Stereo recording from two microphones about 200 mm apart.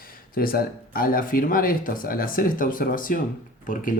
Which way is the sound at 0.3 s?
45° left (ahead or behind).